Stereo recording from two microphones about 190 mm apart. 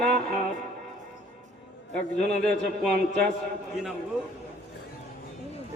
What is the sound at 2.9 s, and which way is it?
Speech, 50° right (ahead or behind).